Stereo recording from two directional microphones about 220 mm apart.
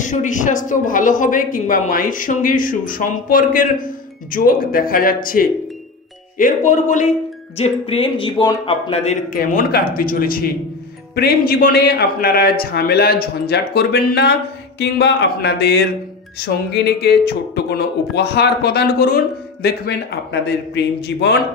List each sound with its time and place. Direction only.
0.0 s speech: 35° left (ahead or behind); by 21.4 s 50° left (ahead or behind)